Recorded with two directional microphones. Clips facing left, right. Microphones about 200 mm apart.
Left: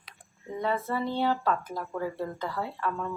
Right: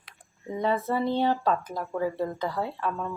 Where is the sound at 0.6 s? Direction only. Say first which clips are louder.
Right 3 dB; 15° right (ahead or behind).